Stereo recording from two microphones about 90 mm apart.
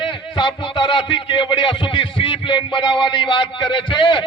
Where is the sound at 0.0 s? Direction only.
65° left (ahead or behind).